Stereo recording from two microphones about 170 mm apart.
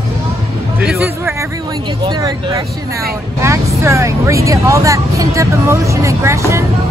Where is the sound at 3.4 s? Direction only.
15° right (ahead or behind).